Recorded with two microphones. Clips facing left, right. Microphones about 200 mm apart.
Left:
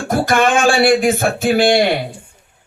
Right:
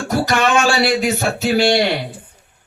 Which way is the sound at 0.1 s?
50° left (ahead or behind).